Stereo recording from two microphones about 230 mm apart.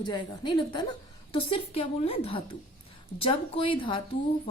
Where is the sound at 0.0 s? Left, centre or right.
Centre.